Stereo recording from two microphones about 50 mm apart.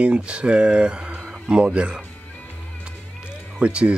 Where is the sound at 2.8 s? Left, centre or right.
Right.